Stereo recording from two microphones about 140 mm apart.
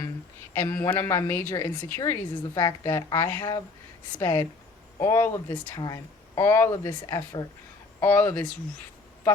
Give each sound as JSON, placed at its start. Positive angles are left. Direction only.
{"t": 0.5, "sound": "a woman's voice", "side_deg": 15}
{"t": 8.0, "sound": "a woman's voice", "side_deg": 15}